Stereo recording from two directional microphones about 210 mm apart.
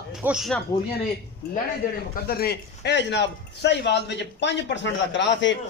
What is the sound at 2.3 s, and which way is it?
A man's voice, 45° left (ahead or behind).